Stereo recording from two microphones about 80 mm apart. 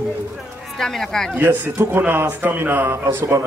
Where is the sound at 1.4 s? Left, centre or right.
Right.